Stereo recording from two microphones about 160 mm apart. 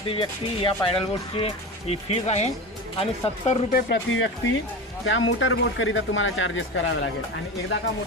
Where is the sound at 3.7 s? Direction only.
70° left (ahead or behind).